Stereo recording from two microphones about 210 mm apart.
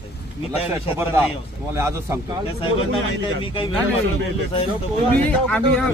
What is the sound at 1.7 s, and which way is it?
Speech, 15° right (ahead or behind).